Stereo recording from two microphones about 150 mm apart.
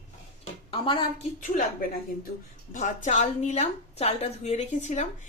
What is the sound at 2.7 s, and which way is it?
A woman's voice, 55° left (ahead or behind).